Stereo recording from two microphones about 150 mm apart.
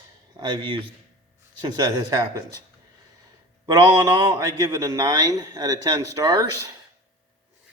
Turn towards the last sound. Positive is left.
turn(degrees=-25)  # may be behind; listen again after turning